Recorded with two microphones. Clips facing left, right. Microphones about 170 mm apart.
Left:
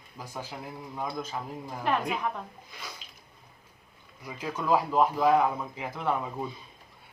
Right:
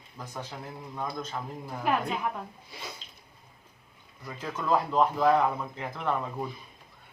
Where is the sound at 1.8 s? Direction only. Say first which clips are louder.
Even; 5° right (ahead or behind).